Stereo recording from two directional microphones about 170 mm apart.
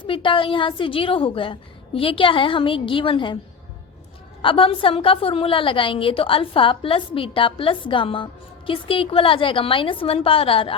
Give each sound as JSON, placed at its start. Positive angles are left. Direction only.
{"t": 0.0, "sound": "a woman's voice", "side_deg": 30}
{"t": 4.4, "sound": "a woman's voice", "side_deg": 30}